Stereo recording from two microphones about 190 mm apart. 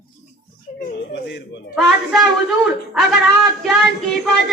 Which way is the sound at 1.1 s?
65° left (ahead or behind).